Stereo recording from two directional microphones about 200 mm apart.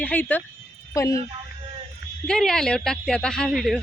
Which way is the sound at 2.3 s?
5° left (ahead or behind).